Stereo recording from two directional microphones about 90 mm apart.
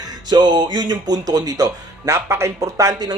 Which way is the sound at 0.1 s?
55° right (ahead or behind).